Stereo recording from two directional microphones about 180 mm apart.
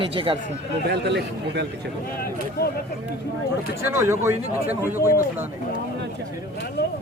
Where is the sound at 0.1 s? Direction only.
30° right (ahead or behind).